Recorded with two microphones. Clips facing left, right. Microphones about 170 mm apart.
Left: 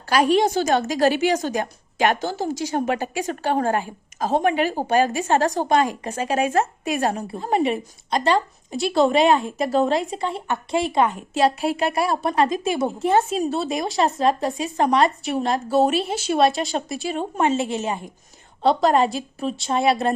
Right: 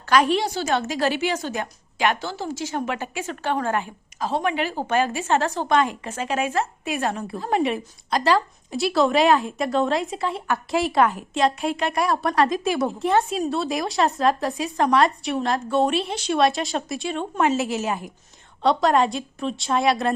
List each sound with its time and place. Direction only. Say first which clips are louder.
0.0 s a woman's voice: even; 35° left (ahead or behind)
0.3 s a woman's voice: left 5 dB; 45° left (ahead or behind)
7.3 s speech: even; centre (ahead or behind)
11.9 s a woman's voice: even; 30° left (ahead or behind)
12.2 s speech: even; centre (ahead or behind)